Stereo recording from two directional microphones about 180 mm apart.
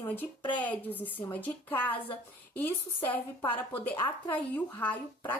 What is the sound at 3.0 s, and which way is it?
Speech, 10° left (ahead or behind).